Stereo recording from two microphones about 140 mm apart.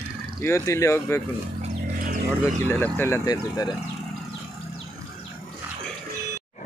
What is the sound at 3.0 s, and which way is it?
Speech, 20° left (ahead or behind).